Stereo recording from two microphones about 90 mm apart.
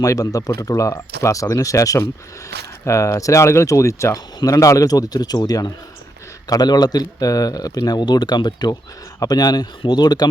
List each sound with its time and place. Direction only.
0.0 s speech: 40° left (ahead or behind)